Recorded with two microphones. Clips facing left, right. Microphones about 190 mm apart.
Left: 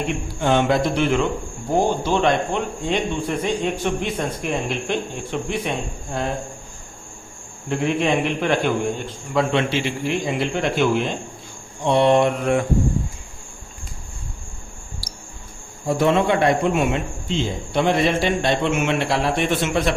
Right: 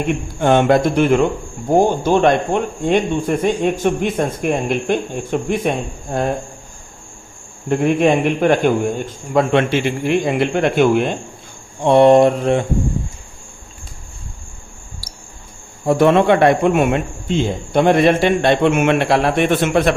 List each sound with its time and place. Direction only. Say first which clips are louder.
0.3 s speech: right 5 dB; 55° right (ahead or behind)
7.7 s speech: right 6 dB; 50° right (ahead or behind)
11.8 s mantra: right 6 dB; 50° right (ahead or behind); by 12.6 s 30° right (ahead or behind)
15.9 s a man's voice: right 6 dB; 60° right (ahead or behind)